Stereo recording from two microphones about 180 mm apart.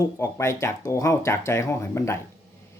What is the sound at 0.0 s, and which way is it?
Speech, 15° left (ahead or behind).